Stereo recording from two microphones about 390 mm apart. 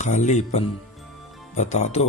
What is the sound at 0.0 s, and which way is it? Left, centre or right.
Music, centre.